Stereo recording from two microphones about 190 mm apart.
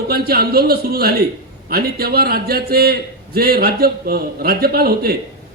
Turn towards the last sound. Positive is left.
turn(degrees=-55)  # may be behind; listen again after turning